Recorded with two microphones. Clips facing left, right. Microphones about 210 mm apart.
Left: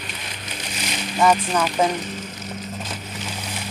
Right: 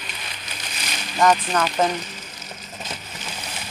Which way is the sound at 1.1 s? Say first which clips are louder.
Even; 10° left (ahead or behind).